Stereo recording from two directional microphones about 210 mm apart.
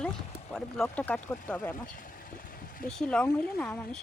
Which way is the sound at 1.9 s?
40° left (ahead or behind).